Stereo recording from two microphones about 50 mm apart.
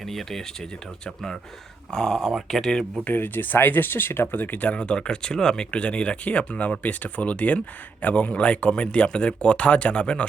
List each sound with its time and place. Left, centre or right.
0.0 s speech: centre
2.2 s speech: centre
3.0 s speech: left